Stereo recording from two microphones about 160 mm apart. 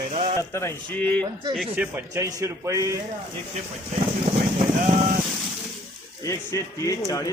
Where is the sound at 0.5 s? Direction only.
15° left (ahead or behind).